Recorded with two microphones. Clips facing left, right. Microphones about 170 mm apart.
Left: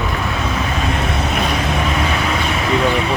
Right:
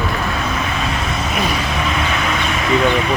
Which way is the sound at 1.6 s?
45° left (ahead or behind).